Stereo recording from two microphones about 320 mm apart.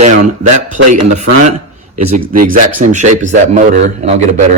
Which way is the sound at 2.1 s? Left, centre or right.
Right.